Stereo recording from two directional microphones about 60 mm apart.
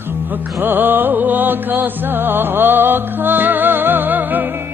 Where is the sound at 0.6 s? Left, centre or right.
Right.